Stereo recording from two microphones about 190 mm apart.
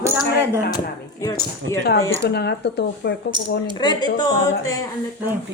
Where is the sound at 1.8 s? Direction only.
60° left (ahead or behind).